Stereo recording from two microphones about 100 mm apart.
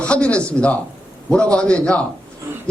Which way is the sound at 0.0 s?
10° left (ahead or behind).